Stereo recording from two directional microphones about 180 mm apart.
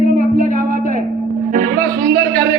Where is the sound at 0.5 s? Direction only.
50° right (ahead or behind).